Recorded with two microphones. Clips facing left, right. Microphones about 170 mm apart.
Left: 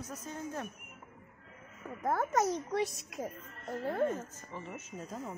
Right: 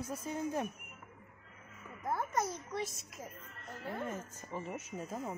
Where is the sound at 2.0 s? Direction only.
75° left (ahead or behind).